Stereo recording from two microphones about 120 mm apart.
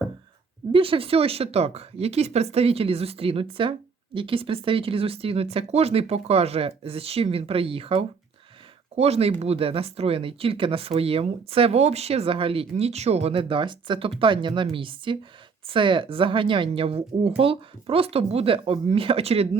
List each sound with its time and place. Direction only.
0.7 s speech: 50° right (ahead or behind)